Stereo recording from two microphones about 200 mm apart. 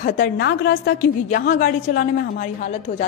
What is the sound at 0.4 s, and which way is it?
Speech, 60° left (ahead or behind).